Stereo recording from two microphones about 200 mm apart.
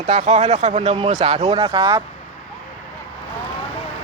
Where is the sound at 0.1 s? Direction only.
35° right (ahead or behind).